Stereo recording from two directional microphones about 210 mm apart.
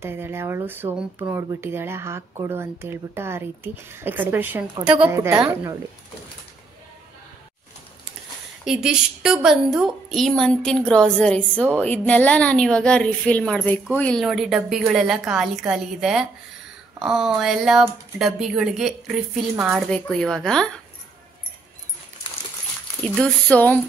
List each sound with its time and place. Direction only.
0.0 s speech: 10° right (ahead or behind)
8.6 s a woman's voice: 5° right (ahead or behind)
19.9 s a woman's voice: 5° left (ahead or behind)
23.1 s speech: 5° left (ahead or behind)